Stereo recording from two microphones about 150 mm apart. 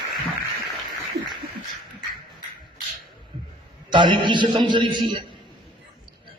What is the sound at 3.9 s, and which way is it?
A man's voice, 30° right (ahead or behind).